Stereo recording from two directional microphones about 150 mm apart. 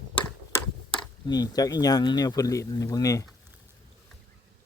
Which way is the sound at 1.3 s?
25° left (ahead or behind).